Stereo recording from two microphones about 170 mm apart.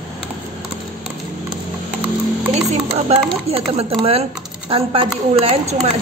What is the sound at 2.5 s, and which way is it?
Speech, 40° right (ahead or behind).